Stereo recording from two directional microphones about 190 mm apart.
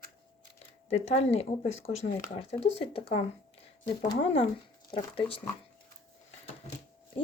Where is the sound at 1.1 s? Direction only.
35° left (ahead or behind).